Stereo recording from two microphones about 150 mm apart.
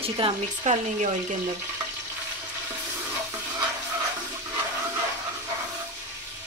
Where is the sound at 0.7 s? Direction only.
50° right (ahead or behind).